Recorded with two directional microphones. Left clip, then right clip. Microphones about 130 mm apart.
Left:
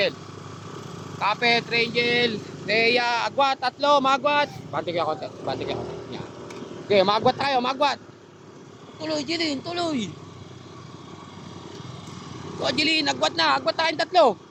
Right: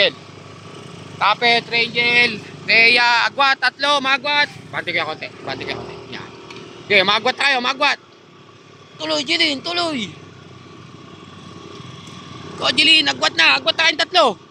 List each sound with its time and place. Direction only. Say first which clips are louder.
1.2 s a man's voice: right 6 dB; 10° right (ahead or behind)
1.7 s a sound: right 6 dB; 10° left (ahead or behind)
2.6 s speech: right 8 dB; centre (ahead or behind)
4.2 s speech: right 4 dB; 25° left (ahead or behind)
4.7 s speech: right 3 dB; 5° left (ahead or behind)
9.0 s speech: right 8 dB; 20° right (ahead or behind)
12.5 s a man's voice: right 9 dB; 10° right (ahead or behind)